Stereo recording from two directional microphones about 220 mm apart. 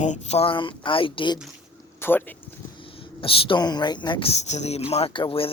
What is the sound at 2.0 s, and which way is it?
Speech, 10° left (ahead or behind).